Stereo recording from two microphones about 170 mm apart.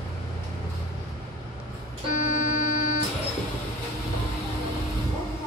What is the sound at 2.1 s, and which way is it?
Buzzer, 50° left (ahead or behind).